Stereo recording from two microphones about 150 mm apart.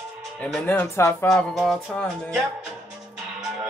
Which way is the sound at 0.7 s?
15° left (ahead or behind).